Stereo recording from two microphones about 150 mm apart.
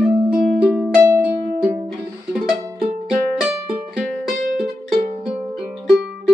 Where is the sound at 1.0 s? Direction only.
20° right (ahead or behind).